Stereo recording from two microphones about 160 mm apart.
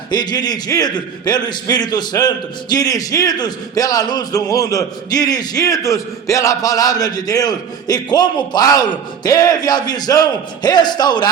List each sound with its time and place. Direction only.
0.1 s a man's voice: 25° left (ahead or behind)